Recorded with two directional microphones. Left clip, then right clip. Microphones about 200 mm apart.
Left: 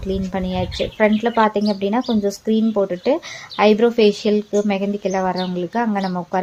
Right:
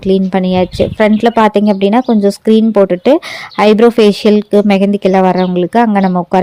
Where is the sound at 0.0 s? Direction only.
45° right (ahead or behind).